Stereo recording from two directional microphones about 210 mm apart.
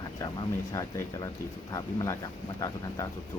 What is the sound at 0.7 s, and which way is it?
Speech, 15° left (ahead or behind).